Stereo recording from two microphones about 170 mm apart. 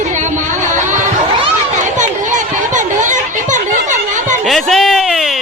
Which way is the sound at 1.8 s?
45° right (ahead or behind).